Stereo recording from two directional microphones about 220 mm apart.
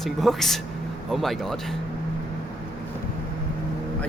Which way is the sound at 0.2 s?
Centre (ahead or behind).